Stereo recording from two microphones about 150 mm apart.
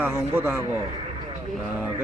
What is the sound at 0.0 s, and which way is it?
Speech, 15° right (ahead or behind).